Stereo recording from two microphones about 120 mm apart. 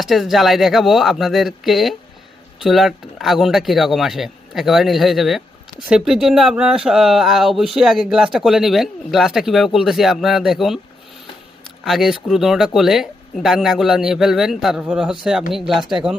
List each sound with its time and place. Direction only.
0.0 s speech: centre (ahead or behind)
11.9 s speech: centre (ahead or behind)